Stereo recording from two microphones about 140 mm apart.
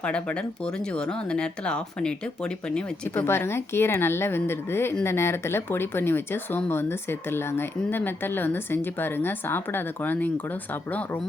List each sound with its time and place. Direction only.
0.0 s speech: 10° left (ahead or behind)
3.2 s speech: 15° left (ahead or behind)